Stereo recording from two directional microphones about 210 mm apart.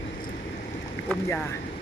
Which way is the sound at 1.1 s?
10° left (ahead or behind).